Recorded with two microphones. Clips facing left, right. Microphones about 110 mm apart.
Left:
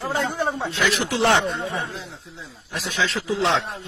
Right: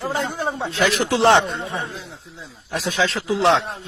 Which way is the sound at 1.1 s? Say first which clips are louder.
Right 5 dB; 25° right (ahead or behind).